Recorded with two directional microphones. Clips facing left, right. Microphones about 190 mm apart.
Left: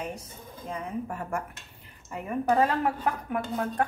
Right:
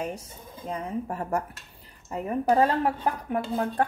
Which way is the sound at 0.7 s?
35° right (ahead or behind).